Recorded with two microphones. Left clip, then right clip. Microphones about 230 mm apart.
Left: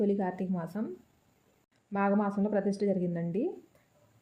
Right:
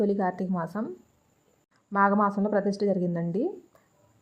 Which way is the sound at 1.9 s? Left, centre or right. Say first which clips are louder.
Right 7 dB; centre.